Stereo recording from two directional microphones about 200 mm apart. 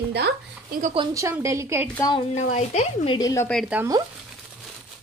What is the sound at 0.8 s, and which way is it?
Speech, 30° right (ahead or behind).